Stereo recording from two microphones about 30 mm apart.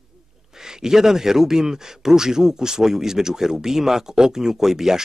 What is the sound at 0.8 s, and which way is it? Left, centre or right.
Speech, centre.